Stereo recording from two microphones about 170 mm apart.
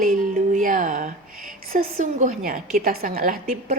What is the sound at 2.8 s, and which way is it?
Speech, 60° right (ahead or behind).